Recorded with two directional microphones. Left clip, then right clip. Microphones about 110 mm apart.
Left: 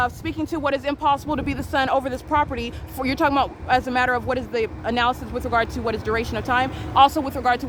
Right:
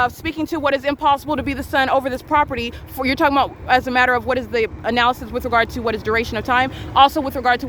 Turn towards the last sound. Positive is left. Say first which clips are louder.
# right 3 dB
turn(degrees=-25)  # may be behind; listen again after turning